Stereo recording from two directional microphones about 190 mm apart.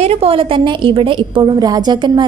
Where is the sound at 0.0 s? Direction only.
30° right (ahead or behind).